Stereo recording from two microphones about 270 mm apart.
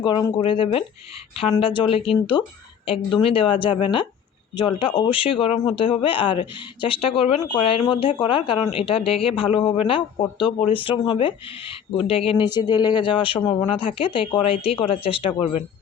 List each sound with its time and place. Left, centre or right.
0.0 s speech: centre